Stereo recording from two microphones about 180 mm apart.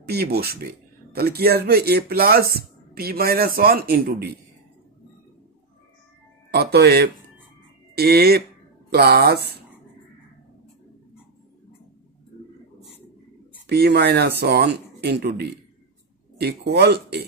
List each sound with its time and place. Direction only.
0.1 s speech: 60° right (ahead or behind)
6.5 s speech: 65° right (ahead or behind)
13.7 s speech: 65° right (ahead or behind)